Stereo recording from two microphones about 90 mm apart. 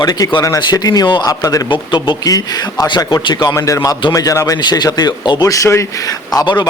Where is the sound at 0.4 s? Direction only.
40° left (ahead or behind).